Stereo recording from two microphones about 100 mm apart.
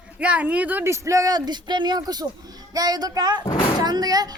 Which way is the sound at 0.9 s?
30° right (ahead or behind).